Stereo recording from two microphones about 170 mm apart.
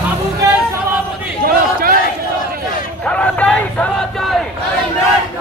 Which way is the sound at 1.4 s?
60° right (ahead or behind).